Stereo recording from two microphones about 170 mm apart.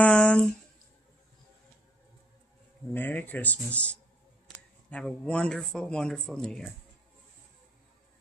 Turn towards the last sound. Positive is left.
turn(degrees=5)  # may be behind; listen again after turning